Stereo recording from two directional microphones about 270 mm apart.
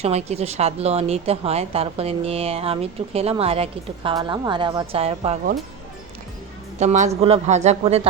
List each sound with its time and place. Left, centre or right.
0.0 s a woman's voice: right
6.7 s a woman's voice: right